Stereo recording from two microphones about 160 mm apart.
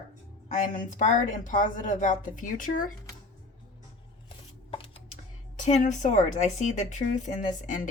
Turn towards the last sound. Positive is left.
turn(degrees=55)  # may be behind; listen again after turning